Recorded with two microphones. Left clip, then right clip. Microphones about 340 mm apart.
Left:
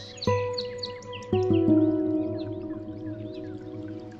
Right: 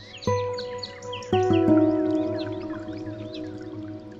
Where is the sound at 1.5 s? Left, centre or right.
Right.